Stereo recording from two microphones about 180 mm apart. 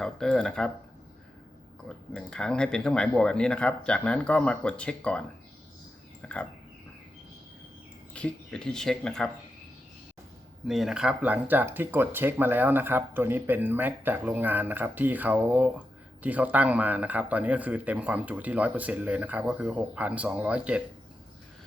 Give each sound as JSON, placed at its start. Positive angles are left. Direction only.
{"t": 0.0, "sound": "speech", "side_deg": 5}
{"t": 2.1, "sound": "speech", "side_deg": 5}
{"t": 6.2, "sound": "speech", "side_deg": 5}
{"t": 8.1, "sound": "speech", "side_deg": 5}
{"t": 10.7, "sound": "speech", "side_deg": 0}